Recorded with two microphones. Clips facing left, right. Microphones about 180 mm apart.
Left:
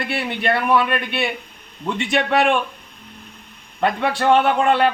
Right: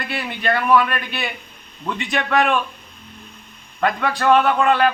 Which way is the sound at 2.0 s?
25° left (ahead or behind).